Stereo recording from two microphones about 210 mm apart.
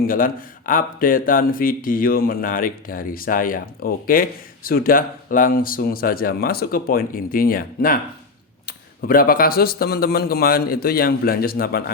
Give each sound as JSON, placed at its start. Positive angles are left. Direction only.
{"t": 0.0, "sound": "speech", "side_deg": 40}